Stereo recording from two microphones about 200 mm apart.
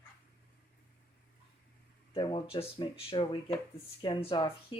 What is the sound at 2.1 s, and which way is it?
Speech, 25° left (ahead or behind).